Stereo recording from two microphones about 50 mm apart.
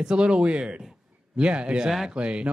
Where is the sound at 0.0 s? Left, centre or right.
Centre.